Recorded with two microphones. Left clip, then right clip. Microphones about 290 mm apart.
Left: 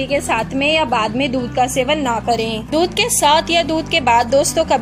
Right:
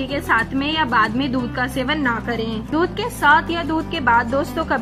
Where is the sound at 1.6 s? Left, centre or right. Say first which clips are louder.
Left 6 dB; left.